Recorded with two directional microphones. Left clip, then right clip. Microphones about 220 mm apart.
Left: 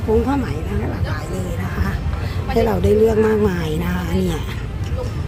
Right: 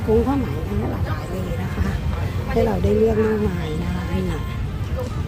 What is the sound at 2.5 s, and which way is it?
Speech, 15° left (ahead or behind).